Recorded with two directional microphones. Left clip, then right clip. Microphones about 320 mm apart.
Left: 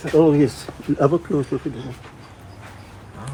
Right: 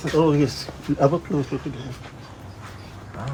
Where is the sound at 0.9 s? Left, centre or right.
Left.